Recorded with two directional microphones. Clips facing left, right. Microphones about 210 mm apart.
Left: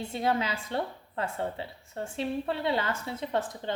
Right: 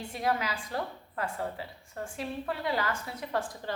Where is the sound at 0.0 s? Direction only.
25° left (ahead or behind).